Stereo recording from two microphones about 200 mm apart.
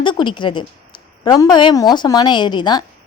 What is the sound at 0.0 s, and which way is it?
A woman's voice, 25° left (ahead or behind).